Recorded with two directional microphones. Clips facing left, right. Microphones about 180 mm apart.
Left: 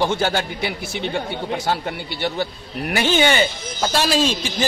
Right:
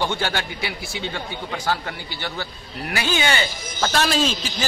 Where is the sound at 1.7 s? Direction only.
25° left (ahead or behind).